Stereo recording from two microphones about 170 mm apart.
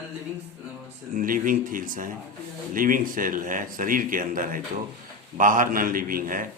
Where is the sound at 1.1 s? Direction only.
55° right (ahead or behind).